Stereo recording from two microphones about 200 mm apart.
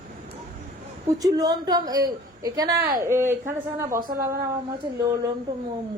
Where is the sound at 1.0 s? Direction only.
20° right (ahead or behind).